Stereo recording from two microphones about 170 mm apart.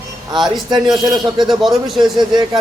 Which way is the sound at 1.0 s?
25° right (ahead or behind).